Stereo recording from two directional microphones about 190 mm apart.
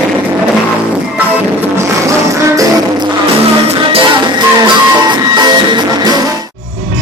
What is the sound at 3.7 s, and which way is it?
Music, 25° right (ahead or behind).